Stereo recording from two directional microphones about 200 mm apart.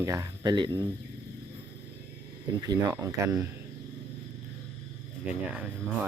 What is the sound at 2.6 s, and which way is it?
Speech, 15° right (ahead or behind).